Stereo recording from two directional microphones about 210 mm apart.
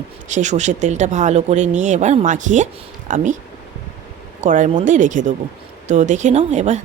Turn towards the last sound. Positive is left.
turn(degrees=-35)  # may be behind; listen again after turning